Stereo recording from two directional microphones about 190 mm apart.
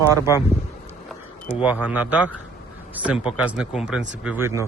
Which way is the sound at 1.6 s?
10° right (ahead or behind).